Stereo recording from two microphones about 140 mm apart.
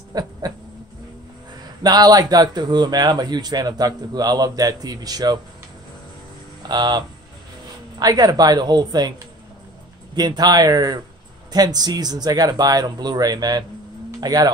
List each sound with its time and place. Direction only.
0.1 s a sound: 30° right (ahead or behind)
1.8 s speech: 30° right (ahead or behind)
6.6 s speech: 30° right (ahead or behind)
10.1 s speech: 30° right (ahead or behind)